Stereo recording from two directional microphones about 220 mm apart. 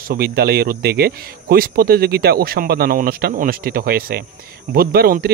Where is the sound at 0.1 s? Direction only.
45° right (ahead or behind).